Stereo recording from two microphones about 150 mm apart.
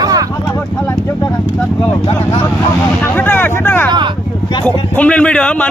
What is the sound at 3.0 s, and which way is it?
A man's voice, 15° left (ahead or behind).